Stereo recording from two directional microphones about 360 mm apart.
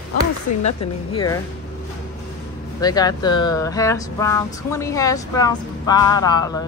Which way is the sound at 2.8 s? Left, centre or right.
Centre.